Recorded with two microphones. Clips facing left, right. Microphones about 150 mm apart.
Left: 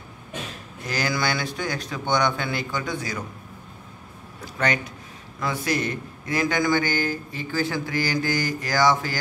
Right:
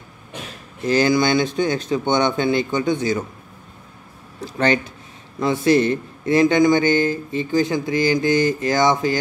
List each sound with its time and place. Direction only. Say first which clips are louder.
0.8 s speech: right 9 dB; 25° right (ahead or behind)
5.4 s speech: right 9 dB; 25° right (ahead or behind)